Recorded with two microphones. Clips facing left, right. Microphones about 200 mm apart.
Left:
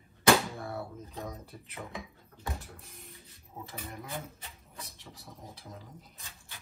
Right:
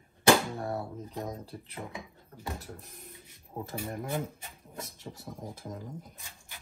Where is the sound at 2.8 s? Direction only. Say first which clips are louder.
Right 2 dB; 45° right (ahead or behind).